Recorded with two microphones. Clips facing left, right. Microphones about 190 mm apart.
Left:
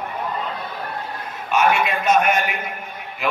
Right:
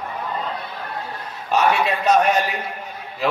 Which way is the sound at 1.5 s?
35° right (ahead or behind).